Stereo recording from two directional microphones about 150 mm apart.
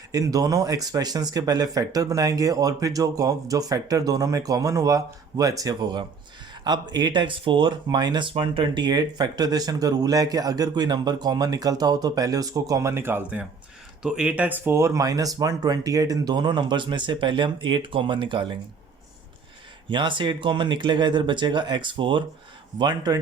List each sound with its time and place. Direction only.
0.1 s speech: 25° right (ahead or behind)
19.9 s speech: 30° right (ahead or behind)